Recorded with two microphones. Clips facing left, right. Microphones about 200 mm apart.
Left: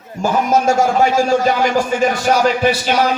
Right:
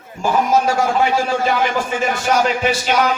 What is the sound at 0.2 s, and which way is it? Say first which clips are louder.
A man's voice: left 1 dB; 45° left (ahead or behind).